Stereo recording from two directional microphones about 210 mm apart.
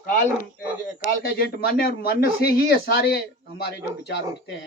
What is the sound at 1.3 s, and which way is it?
A man's voice, 45° left (ahead or behind).